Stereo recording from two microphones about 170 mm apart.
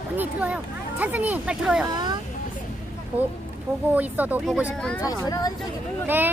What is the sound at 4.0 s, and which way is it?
Speech, 10° right (ahead or behind).